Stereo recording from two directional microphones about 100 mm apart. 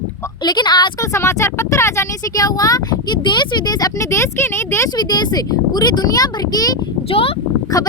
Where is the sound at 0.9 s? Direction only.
30° left (ahead or behind).